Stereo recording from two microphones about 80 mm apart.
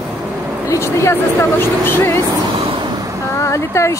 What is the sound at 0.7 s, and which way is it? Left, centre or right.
Speech, left.